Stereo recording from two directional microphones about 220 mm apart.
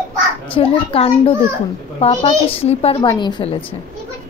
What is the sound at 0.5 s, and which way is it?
A woman's voice, 25° left (ahead or behind).